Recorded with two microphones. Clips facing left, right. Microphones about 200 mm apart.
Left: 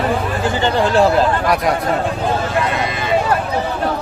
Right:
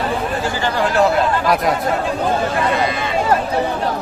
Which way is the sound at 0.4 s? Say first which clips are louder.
Left 6 dB; 25° left (ahead or behind).